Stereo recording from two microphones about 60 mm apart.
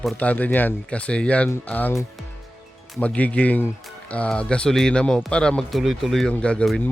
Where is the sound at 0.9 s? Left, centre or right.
Centre.